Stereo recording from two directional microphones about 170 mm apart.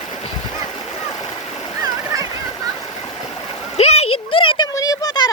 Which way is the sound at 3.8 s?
40° left (ahead or behind).